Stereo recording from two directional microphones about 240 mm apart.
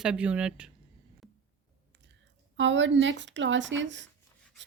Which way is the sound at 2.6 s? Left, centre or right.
Right.